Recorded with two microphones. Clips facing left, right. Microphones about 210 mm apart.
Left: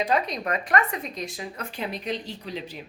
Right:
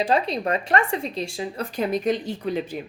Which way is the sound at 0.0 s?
30° right (ahead or behind).